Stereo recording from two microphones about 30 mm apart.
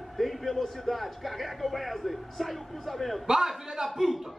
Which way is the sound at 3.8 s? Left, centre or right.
Centre.